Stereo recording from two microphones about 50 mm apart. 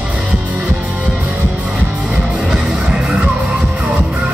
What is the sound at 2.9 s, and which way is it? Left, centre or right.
Music, centre.